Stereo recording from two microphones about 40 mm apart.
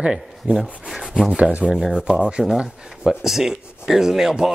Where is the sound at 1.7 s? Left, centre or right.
Centre.